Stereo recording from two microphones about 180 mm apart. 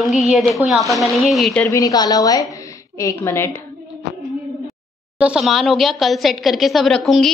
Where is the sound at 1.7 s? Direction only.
20° left (ahead or behind).